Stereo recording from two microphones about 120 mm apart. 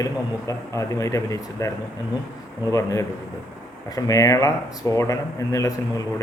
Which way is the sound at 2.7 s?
25° left (ahead or behind).